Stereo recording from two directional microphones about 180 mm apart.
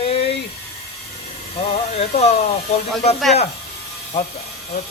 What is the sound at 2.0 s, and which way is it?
Speech, 35° left (ahead or behind).